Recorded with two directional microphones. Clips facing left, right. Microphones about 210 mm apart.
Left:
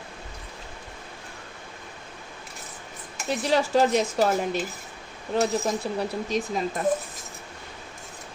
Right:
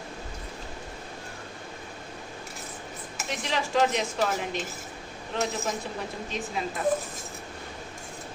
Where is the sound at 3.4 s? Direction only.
40° left (ahead or behind).